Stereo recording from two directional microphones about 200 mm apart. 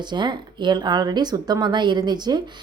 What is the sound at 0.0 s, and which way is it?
A woman's voice, 20° right (ahead or behind).